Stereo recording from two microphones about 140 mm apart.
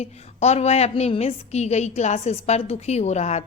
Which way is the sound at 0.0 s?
50° left (ahead or behind).